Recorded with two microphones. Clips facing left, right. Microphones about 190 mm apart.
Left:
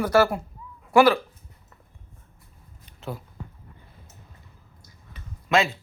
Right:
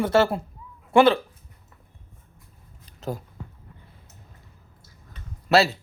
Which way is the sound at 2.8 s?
40° right (ahead or behind).